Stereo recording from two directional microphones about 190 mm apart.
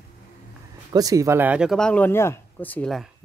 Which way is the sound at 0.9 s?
20° right (ahead or behind).